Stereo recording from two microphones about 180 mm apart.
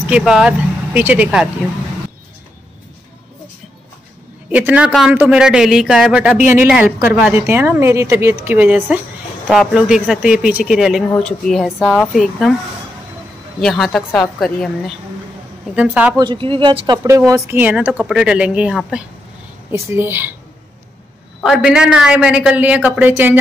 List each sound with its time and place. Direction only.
0.1 s speech: 5° right (ahead or behind)
4.5 s speech: 10° right (ahead or behind)
13.6 s speech: centre (ahead or behind)
15.7 s speech: 5° right (ahead or behind)
16.2 s speech: 25° right (ahead or behind)
21.4 s speech: 5° right (ahead or behind)